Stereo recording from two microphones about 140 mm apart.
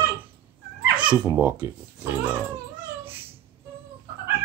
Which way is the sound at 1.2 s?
15° right (ahead or behind).